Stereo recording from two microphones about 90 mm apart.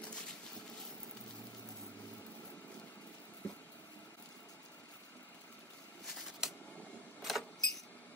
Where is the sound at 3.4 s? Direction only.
15° left (ahead or behind).